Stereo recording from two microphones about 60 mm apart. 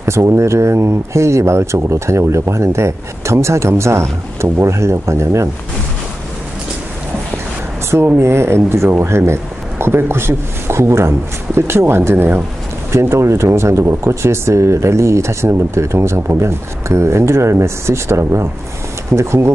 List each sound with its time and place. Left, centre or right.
0.0 s speech: right
7.9 s speech: right